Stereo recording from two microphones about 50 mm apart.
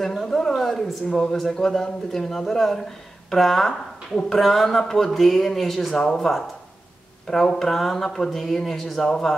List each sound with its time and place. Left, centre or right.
0.0 s speech: centre
1.1 s speech: centre